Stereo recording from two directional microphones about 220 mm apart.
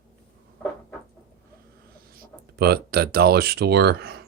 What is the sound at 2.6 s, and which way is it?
Speech, 45° right (ahead or behind).